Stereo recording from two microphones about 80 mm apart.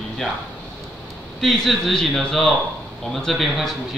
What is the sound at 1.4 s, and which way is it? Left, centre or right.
Speech, centre.